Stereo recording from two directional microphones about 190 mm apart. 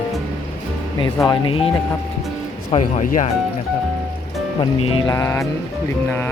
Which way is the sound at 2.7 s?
40° left (ahead or behind).